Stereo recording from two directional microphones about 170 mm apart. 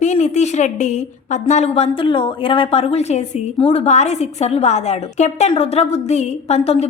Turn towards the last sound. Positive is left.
turn(degrees=40)  # may be behind; listen again after turning